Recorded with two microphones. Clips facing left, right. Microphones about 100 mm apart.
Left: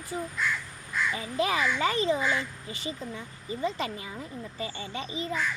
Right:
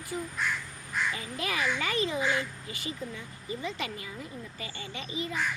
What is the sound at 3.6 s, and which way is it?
A child's voice, 35° left (ahead or behind).